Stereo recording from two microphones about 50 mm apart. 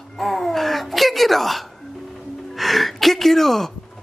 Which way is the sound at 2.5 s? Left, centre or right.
Centre.